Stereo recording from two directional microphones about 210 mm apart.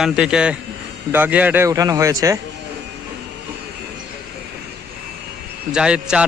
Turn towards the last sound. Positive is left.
turn(degrees=-5)  # may be behind; listen again after turning